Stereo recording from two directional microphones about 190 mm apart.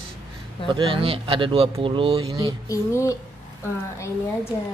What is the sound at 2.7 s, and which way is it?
Speech, 15° left (ahead or behind).